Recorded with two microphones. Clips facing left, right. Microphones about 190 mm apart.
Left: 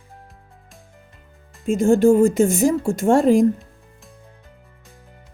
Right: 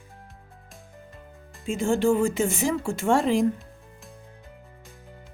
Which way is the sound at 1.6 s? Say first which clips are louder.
Left 8 dB; 40° left (ahead or behind).